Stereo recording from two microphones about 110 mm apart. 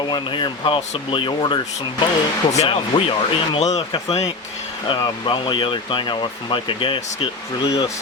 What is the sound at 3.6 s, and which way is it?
Speech, 85° left.